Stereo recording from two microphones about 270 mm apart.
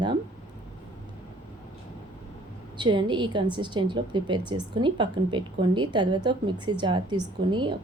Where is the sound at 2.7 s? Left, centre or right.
Centre.